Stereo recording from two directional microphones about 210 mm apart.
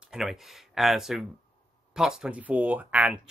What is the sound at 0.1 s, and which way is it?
Speech, centre (ahead or behind).